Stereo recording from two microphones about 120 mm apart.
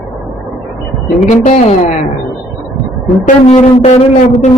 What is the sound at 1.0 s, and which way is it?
Speech, 70° left (ahead or behind).